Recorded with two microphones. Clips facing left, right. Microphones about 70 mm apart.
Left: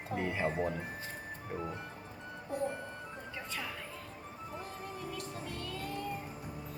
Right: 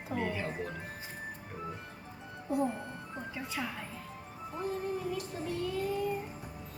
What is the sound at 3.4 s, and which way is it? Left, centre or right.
Speech, centre.